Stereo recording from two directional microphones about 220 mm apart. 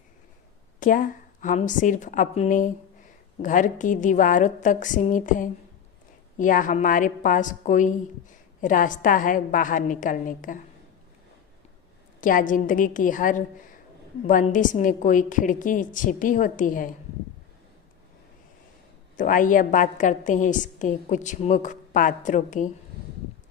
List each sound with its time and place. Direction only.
0.8 s a woman's voice: 40° left (ahead or behind)
12.2 s a woman's voice: 40° left (ahead or behind)
19.1 s a woman's voice: 35° left (ahead or behind)